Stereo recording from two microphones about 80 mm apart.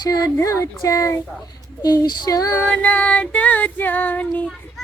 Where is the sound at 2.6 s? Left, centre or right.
Centre.